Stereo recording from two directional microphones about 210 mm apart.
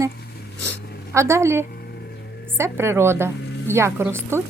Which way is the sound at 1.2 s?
15° right (ahead or behind).